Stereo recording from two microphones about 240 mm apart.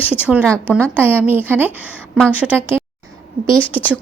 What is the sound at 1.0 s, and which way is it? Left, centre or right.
Speech, centre.